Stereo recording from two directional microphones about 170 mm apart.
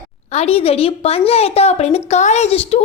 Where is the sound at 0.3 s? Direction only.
35° left (ahead or behind).